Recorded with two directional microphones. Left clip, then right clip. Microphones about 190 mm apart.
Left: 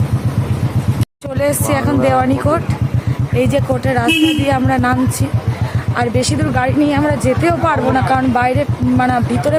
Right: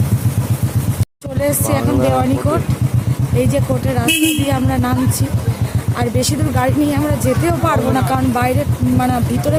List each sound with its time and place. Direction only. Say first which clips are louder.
1.4 s speech: left 2 dB; centre (ahead or behind)
6.0 s speech: left 2 dB; centre (ahead or behind)